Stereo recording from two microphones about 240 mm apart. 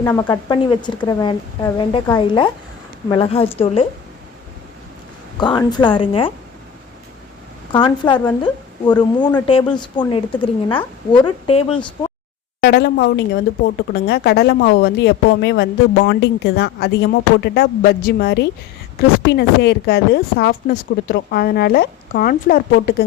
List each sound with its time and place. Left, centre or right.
0.0 s a woman's voice: centre
5.4 s a woman's voice: centre
7.7 s a woman's voice: centre
12.5 s a woman's voice: left